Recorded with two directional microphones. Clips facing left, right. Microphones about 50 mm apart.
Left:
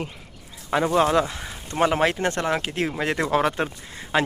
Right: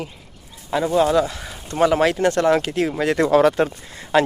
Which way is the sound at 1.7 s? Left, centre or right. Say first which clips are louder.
Right 4 dB; left.